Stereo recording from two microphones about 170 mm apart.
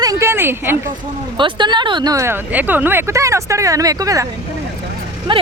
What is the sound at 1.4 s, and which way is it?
Speech, 25° right (ahead or behind).